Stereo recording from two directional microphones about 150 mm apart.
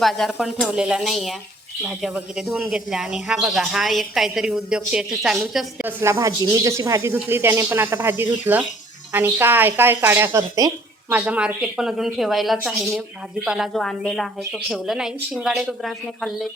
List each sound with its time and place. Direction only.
0.0 s speech: centre (ahead or behind)
5.8 s speech: 20° right (ahead or behind)
11.1 s speech: 10° right (ahead or behind)